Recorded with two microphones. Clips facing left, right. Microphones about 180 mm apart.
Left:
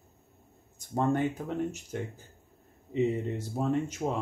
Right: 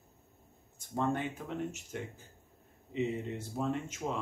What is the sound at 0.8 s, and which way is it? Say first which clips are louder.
Speech: left 5 dB; 45° left (ahead or behind).